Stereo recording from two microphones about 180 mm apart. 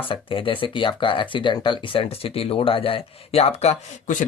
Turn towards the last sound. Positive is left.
turn(degrees=40)  # may be behind; listen again after turning